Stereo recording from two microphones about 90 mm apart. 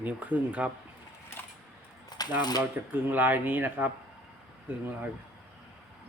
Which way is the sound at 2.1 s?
50° left (ahead or behind).